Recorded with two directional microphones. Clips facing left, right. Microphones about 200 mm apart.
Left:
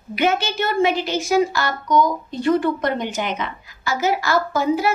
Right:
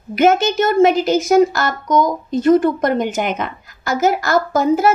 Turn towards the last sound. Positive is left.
turn(degrees=-45)  # may be behind; listen again after turning